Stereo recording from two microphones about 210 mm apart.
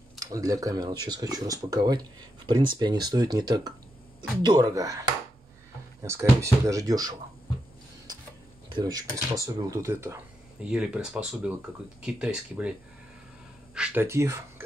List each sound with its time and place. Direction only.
0.2 s speech: 15° right (ahead or behind)
6.0 s speech: 15° right (ahead or behind)
8.6 s speech: 20° right (ahead or behind)
13.7 s speech: 10° right (ahead or behind)